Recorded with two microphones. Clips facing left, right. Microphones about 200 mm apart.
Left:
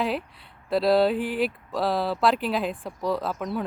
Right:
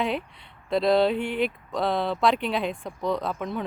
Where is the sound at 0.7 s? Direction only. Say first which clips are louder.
Left 1 dB; 5° left (ahead or behind).